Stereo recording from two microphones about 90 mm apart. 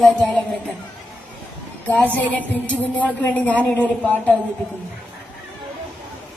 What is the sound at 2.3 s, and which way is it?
A woman's voice, 15° left (ahead or behind).